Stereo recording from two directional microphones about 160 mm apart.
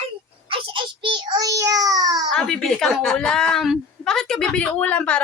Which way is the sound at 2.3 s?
Centre (ahead or behind).